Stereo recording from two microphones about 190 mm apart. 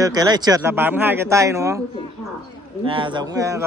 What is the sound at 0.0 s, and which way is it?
Speech, 20° right (ahead or behind).